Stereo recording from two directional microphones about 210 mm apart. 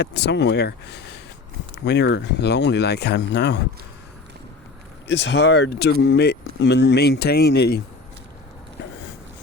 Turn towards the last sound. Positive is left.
turn(degrees=50)  # may be behind; listen again after turning